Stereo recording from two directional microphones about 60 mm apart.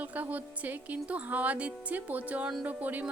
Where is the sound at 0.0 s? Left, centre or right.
Right.